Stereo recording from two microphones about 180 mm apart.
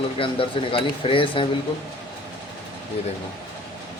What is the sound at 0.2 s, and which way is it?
Speech, 30° left (ahead or behind).